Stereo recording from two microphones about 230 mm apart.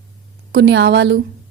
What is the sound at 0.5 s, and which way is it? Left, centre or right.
Speech, right.